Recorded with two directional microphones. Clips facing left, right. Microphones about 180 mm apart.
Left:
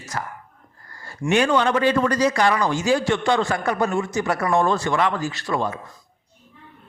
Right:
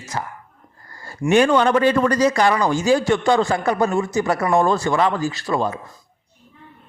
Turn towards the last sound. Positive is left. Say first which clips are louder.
# right 3 dB
turn(degrees=-30)  # may be behind; listen again after turning